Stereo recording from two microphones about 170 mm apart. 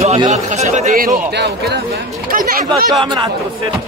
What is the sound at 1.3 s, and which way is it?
Speech, 80° right.